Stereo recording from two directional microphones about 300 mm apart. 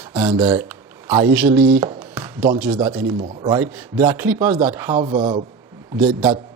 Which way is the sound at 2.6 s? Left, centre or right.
Centre.